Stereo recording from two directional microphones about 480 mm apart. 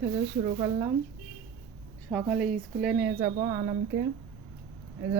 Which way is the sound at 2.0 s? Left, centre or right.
Centre.